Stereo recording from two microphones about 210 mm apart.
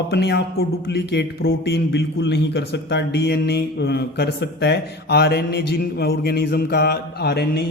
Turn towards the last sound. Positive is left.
turn(degrees=50)  # may be behind; listen again after turning